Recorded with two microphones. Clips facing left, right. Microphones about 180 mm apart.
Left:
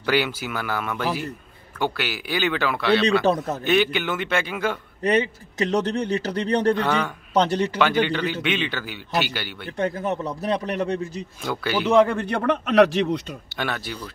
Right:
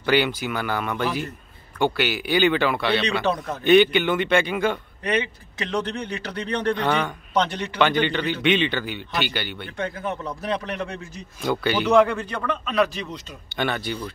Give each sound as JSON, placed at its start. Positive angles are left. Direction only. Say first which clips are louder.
{"t": 0.0, "sound": "a man's voice", "louder": "right 2 dB", "side_deg": 5}
{"t": 3.3, "sound": "a man's voice", "louder": "left 3 dB", "side_deg": 25}
{"t": 3.6, "sound": "a man's voice", "louder": "right 6 dB", "side_deg": 0}
{"t": 5.0, "sound": "a man's voice", "louder": "left 4 dB", "side_deg": 40}
{"t": 6.8, "sound": "a man's voice", "louder": "even", "side_deg": 5}
{"t": 7.3, "sound": "a man's voice", "louder": "left 4 dB", "side_deg": 35}
{"t": 7.8, "sound": "a man's voice", "louder": "right 3 dB", "side_deg": 5}
{"t": 9.7, "sound": "a man's voice", "louder": "left 7 dB", "side_deg": 40}
{"t": 11.4, "sound": "a man's voice", "louder": "right 2 dB", "side_deg": 0}
{"t": 12.1, "sound": "a man's voice", "louder": "left 4 dB", "side_deg": 60}
{"t": 13.6, "sound": "a man's voice", "louder": "right 4 dB", "side_deg": 5}